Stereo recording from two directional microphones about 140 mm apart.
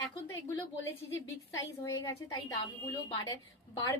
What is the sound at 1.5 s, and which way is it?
Speech, 25° left (ahead or behind).